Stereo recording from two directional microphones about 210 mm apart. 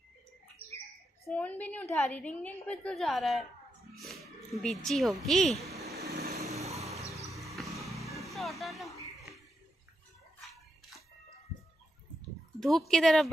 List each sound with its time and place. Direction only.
1.2 s a woman's voice: 10° left (ahead or behind)
6.3 s vehicle: 15° right (ahead or behind)
6.7 s a sound: 15° right (ahead or behind)
7.3 s vehicle: centre (ahead or behind)
12.5 s speech: centre (ahead or behind)